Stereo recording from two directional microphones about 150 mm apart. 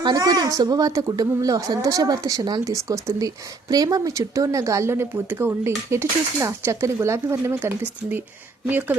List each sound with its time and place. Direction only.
0.0 s speech: 25° right (ahead or behind)